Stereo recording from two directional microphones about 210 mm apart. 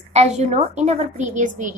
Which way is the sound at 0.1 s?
30° right (ahead or behind).